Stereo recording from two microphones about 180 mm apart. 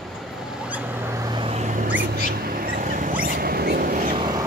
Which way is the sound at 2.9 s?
45° right (ahead or behind).